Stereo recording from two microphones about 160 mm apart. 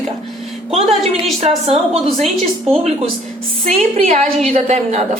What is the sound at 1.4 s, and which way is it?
Speech, 40° right (ahead or behind).